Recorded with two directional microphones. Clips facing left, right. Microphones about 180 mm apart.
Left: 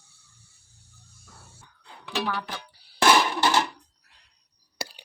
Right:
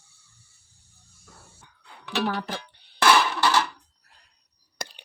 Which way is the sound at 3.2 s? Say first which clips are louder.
Even; 20° left (ahead or behind).